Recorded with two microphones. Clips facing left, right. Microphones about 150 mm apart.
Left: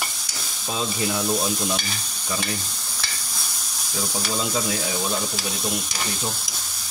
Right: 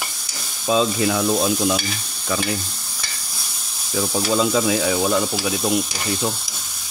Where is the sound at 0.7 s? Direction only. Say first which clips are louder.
Right 8 dB; 90° right.